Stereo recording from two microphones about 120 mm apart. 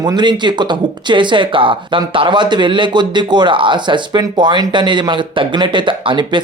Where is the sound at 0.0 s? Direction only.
35° right (ahead or behind).